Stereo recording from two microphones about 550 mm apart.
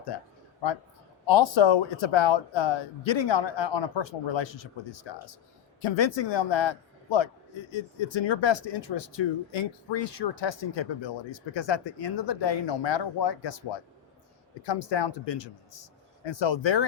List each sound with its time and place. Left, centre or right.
0.1 s speech: left
1.3 s speech: left
5.8 s speech: left